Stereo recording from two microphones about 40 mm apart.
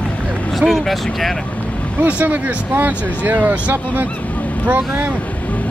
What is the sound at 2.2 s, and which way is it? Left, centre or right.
Speech, right.